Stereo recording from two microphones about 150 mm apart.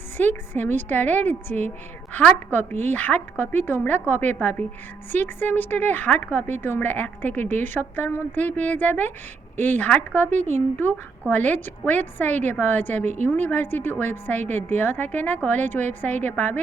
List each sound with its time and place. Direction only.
0.2 s a woman's voice: 10° left (ahead or behind)
10.2 s speech: 50° right (ahead or behind)
11.3 s a woman's voice: 10° left (ahead or behind)